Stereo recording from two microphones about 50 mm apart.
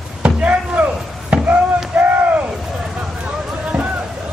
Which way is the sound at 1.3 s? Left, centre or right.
Right.